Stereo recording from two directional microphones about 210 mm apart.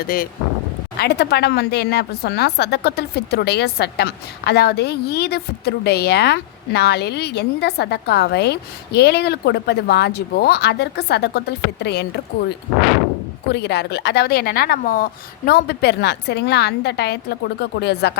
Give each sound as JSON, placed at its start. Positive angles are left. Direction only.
{"t": 0.0, "sound": "speech", "side_deg": 45}
{"t": 13.5, "sound": "speech", "side_deg": 50}